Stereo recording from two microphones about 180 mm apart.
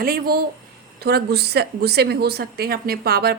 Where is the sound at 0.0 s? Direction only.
55° right (ahead or behind).